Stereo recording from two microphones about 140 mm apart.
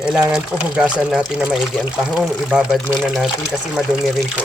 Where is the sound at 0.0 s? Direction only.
5° right (ahead or behind).